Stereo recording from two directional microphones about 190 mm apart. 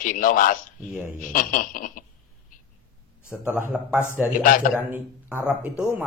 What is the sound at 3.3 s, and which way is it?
A man's voice, 5° right (ahead or behind).